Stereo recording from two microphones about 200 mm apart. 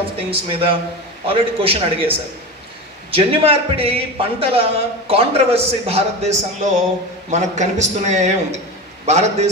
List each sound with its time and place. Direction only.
0.3 s a man's voice: 25° right (ahead or behind)